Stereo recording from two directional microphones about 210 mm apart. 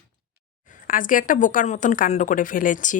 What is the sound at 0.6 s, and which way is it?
A woman's voice, 40° left (ahead or behind).